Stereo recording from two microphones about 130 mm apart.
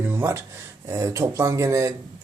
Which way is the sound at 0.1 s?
20° right (ahead or behind).